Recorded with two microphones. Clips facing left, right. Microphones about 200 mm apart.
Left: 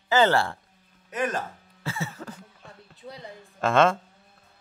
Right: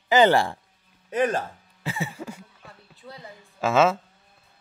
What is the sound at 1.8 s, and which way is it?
Cough, 15° right (ahead or behind).